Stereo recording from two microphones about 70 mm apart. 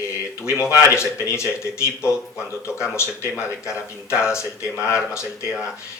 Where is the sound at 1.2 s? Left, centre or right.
Left.